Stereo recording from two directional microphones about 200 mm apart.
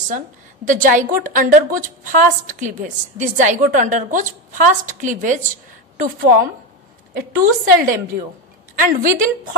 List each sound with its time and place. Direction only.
0.7 s a woman's voice: 40° right (ahead or behind)